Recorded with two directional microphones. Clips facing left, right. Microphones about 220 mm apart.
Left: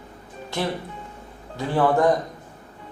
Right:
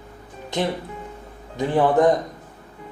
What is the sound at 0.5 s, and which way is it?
Speech, 20° right (ahead or behind).